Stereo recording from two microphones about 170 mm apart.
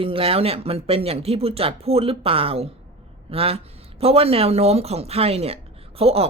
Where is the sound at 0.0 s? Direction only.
30° right (ahead or behind).